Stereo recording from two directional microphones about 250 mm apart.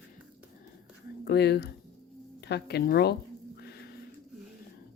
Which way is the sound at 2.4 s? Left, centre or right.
Left.